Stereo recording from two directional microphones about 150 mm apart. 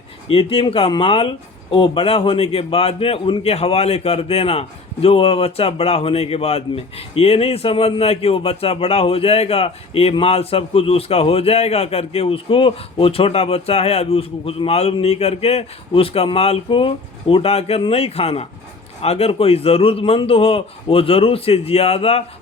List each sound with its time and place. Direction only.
0.3 s speech: 40° left (ahead or behind)